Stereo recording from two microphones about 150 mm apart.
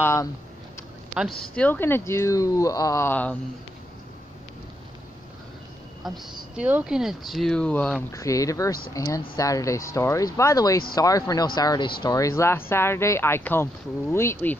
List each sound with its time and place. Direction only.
0.0 s speech: 20° left (ahead or behind)
1.4 s speech: 5° left (ahead or behind)
6.0 s speech: 5° right (ahead or behind)
8.1 s speech: 20° left (ahead or behind)